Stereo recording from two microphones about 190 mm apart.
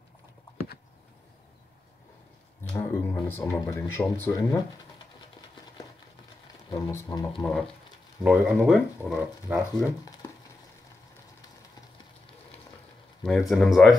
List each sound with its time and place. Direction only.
2.7 s speech: 15° left (ahead or behind)
6.7 s speech: 20° left (ahead or behind)
7.4 s speech: centre (ahead or behind)
13.2 s speech: centre (ahead or behind)